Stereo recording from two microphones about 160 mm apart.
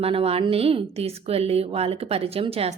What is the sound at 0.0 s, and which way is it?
A woman's voice, 35° right (ahead or behind).